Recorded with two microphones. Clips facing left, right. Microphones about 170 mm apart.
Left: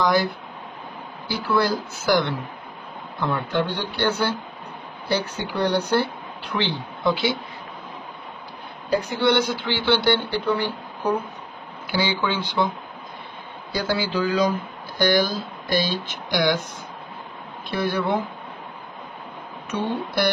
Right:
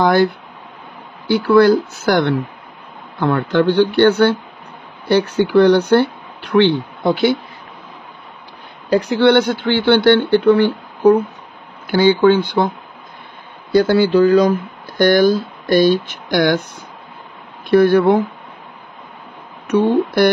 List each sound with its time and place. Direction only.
0.0 s a sound: 55° right (ahead or behind)
1.2 s speech: 65° right (ahead or behind)
8.9 s speech: 80° right; by 16.6 s 55° right (ahead or behind)
17.6 s speech: 55° right (ahead or behind)